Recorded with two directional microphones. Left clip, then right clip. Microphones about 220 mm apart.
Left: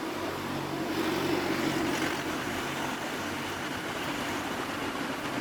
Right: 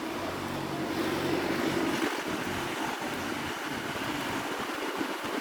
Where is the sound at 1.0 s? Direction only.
50° left (ahead or behind).